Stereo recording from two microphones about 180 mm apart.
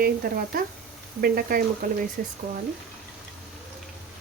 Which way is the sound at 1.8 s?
50° right (ahead or behind).